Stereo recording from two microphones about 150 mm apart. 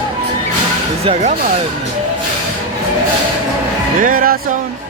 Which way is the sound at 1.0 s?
45° right (ahead or behind).